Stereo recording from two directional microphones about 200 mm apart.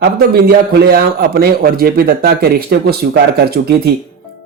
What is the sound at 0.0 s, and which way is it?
Speech, 50° right (ahead or behind).